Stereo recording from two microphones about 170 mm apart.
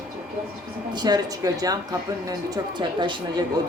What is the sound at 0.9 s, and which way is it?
Speech, 25° right (ahead or behind).